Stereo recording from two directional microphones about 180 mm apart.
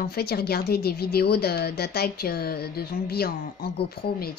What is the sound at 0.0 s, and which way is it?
A woman's voice, 60° left (ahead or behind).